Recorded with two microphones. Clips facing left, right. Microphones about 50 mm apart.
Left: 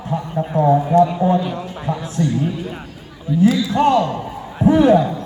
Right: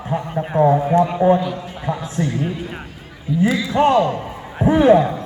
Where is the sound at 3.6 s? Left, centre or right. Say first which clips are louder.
Even; right.